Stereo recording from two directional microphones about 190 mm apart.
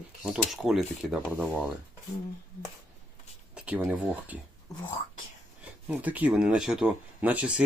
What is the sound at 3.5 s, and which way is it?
Speech, 5° right (ahead or behind).